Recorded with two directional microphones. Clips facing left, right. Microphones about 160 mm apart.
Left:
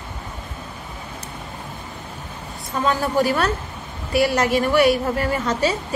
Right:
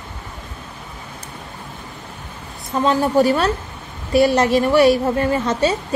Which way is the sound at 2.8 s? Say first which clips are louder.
Right 4 dB; 25° right (ahead or behind).